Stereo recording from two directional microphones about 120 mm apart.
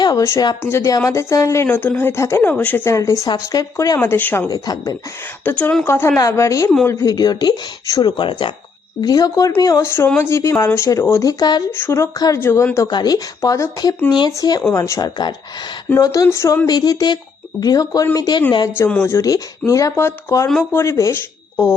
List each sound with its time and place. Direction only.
0.2 s a woman's voice: 25° left (ahead or behind)
4.4 s speech: 30° left (ahead or behind)
5.5 s a woman's voice: 15° left (ahead or behind); by 8.5 s 40° left (ahead or behind)
9.0 s a woman's voice: 30° left (ahead or behind)
11.7 s a woman's voice: 20° left (ahead or behind)
12.9 s a woman's voice: 35° left (ahead or behind)
16.6 s a woman's voice: 35° left (ahead or behind)